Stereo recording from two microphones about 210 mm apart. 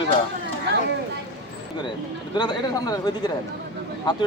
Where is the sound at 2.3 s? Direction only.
20° left (ahead or behind).